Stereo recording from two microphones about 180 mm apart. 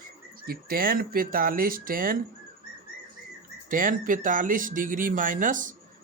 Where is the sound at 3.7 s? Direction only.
50° right (ahead or behind).